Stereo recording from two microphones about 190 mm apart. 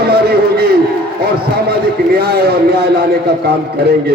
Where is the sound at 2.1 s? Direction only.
55° right (ahead or behind).